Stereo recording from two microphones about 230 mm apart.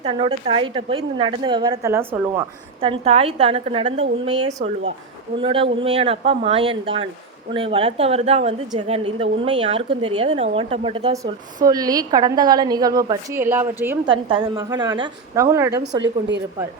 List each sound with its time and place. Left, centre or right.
0.0 s a woman's voice: right
14.0 s a woman's voice: right
15.8 s a woman's voice: right